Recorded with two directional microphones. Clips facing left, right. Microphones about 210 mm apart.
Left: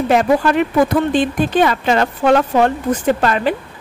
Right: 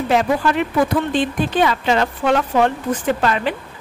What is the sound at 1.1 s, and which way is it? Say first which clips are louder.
A woman's voice: left 3 dB; 50° left (ahead or behind).